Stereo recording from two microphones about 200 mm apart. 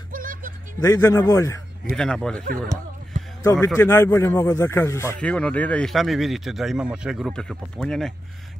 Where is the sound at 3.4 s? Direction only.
15° left (ahead or behind).